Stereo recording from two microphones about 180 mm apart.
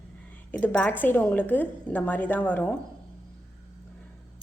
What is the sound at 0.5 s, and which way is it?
Speech, 10° left (ahead or behind).